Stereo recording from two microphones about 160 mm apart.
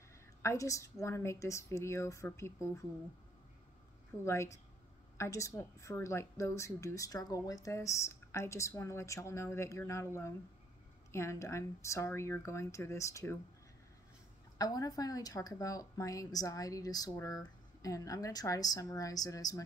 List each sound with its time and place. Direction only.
0.4 s a woman's voice: 20° left (ahead or behind)
4.2 s a woman's voice: 15° left (ahead or behind)
14.6 s a woman's voice: 25° left (ahead or behind)